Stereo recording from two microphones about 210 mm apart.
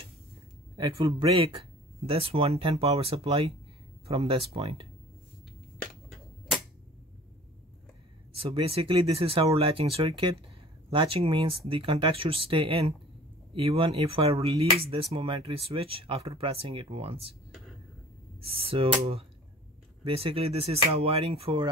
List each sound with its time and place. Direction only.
0.7 s speech: 25° right (ahead or behind)
8.4 s speech: 25° right (ahead or behind)
18.6 s speech: 25° right (ahead or behind)